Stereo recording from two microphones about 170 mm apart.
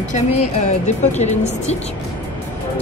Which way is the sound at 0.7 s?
40° left (ahead or behind).